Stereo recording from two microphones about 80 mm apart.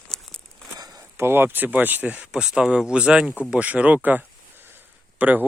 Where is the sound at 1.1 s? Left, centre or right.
Right.